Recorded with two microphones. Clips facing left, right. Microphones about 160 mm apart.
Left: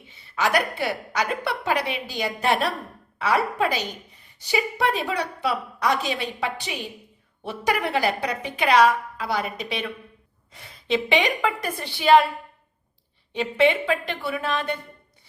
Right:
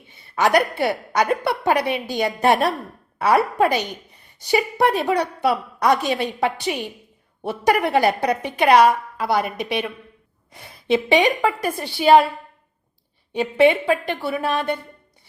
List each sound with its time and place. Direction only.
0.3 s a woman's voice: 55° right (ahead or behind)
11.1 s a woman's voice: 40° right (ahead or behind)
13.4 s a woman's voice: 45° right (ahead or behind)